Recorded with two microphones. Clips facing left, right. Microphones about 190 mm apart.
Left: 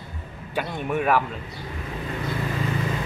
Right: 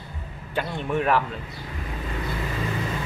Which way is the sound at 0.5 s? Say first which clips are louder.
Even; 10° left (ahead or behind).